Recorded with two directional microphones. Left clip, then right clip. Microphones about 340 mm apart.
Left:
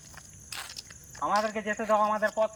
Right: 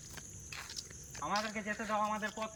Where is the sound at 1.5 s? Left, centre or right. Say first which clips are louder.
Left 10 dB; left.